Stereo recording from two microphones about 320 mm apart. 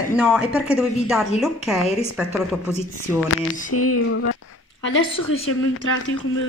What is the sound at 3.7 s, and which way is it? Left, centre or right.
Speech, left.